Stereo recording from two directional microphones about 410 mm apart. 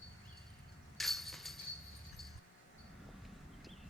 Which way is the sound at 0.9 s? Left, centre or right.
Centre.